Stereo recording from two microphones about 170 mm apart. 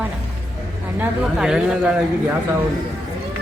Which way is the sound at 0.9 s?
5° right (ahead or behind).